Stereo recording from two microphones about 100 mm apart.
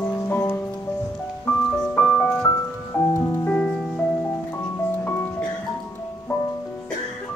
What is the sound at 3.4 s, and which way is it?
Music, 10° left (ahead or behind).